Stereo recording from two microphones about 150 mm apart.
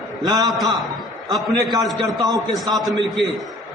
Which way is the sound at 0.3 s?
25° right (ahead or behind).